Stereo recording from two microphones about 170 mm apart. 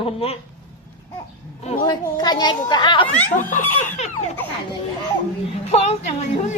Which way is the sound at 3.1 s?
10° left (ahead or behind).